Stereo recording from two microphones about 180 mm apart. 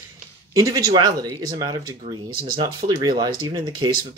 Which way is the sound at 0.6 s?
20° right (ahead or behind).